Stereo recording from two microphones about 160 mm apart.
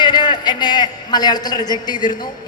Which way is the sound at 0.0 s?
30° left (ahead or behind).